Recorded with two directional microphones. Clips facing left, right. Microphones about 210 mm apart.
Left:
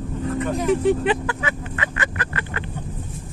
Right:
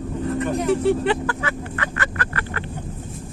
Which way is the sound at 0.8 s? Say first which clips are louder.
Even; 15° left (ahead or behind).